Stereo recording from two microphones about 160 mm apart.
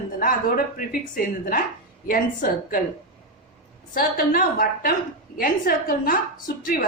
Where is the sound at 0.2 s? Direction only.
60° left (ahead or behind).